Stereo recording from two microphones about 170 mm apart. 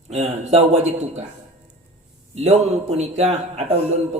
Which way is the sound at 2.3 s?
40° right (ahead or behind).